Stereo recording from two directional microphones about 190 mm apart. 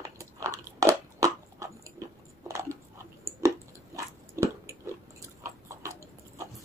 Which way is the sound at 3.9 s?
15° right (ahead or behind).